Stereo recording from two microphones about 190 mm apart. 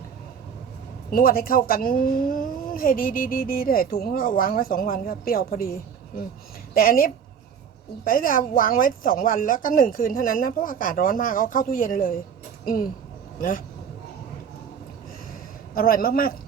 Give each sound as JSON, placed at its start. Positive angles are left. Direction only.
{"t": 1.1, "sound": "speech", "side_deg": 50}
{"t": 15.7, "sound": "speech", "side_deg": 50}